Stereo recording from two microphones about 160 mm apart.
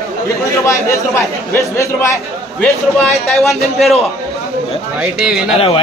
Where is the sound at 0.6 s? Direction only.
20° left (ahead or behind).